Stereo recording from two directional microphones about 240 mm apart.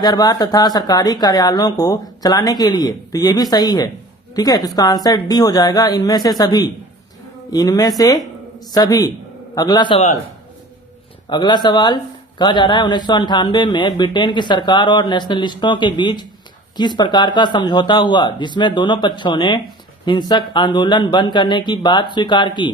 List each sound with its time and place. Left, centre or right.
0.0 s a man's voice: centre
11.3 s a man's voice: centre